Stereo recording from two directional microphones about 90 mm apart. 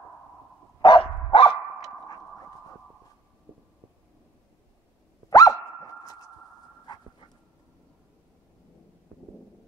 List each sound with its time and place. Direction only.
0.7 s dog: 65° left (ahead or behind)
5.3 s dog: 40° left (ahead or behind)